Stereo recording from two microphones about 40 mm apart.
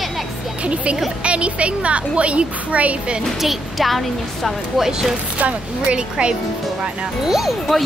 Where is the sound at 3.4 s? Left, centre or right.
Centre.